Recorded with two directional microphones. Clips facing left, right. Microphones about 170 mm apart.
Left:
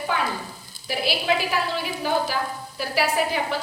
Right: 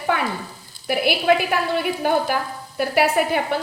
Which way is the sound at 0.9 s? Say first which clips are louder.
Right 6 dB; 55° right (ahead or behind).